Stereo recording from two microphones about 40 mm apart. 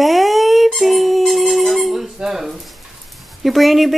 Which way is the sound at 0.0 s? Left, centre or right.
Centre.